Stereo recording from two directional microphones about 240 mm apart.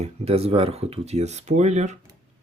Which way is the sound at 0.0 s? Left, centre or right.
Right.